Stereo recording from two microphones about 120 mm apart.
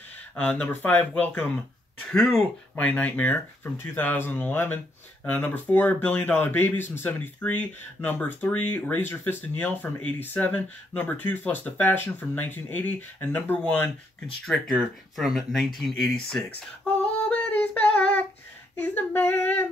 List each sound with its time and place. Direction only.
0.4 s speech: 10° left (ahead or behind)
16.4 s female singing: 10° left (ahead or behind)
18.8 s speech: 15° left (ahead or behind)